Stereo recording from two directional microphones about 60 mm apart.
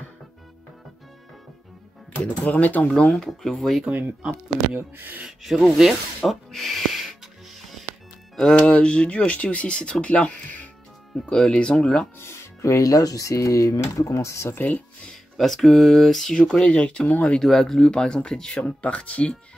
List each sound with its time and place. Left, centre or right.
2.5 s speech: left
3.0 s speech: centre
3.3 s speech: centre
4.7 s speech: right
5.4 s speech: centre
8.5 s speech: centre
12.2 s speech: left
14.5 s speech: left
15.3 s speech: centre
17.4 s speech: centre
18.6 s speech: left